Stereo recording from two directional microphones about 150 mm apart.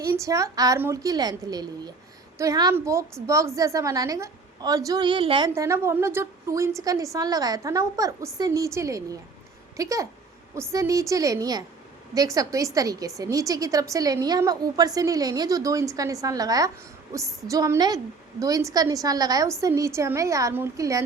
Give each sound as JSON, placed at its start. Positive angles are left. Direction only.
{"t": 0.0, "sound": "a woman's voice", "side_deg": -20}
{"t": 5.5, "sound": "a woman's voice", "side_deg": -20}